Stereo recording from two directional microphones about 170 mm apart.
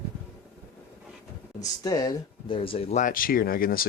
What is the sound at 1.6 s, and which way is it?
Speech, 20° left (ahead or behind).